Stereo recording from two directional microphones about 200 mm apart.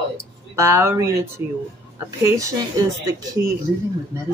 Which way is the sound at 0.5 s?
15° right (ahead or behind).